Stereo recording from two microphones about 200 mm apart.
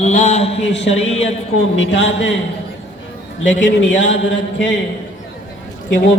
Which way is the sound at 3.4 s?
70° left (ahead or behind).